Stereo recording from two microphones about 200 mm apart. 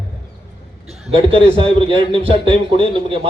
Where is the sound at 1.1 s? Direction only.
25° right (ahead or behind).